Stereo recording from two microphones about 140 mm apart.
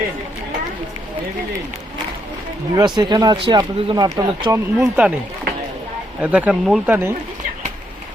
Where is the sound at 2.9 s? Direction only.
30° right (ahead or behind).